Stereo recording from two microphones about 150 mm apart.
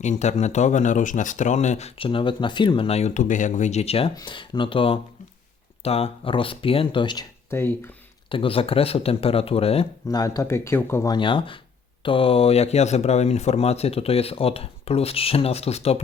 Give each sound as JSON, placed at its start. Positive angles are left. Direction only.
{"t": 0.0, "sound": "speech", "side_deg": 50}
{"t": 2.0, "sound": "speech", "side_deg": 35}
{"t": 4.1, "sound": "speech", "side_deg": 30}
{"t": 7.5, "sound": "speech", "side_deg": 15}
{"t": 8.3, "sound": "speech", "side_deg": 35}
{"t": 10.1, "sound": "speech", "side_deg": 25}
{"t": 11.1, "sound": "speech", "side_deg": 35}